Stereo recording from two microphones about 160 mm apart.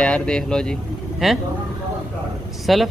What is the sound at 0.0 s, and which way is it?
A man's voice, 5° left (ahead or behind).